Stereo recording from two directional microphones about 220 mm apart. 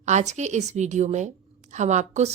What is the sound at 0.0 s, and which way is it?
A woman's voice, 30° right (ahead or behind).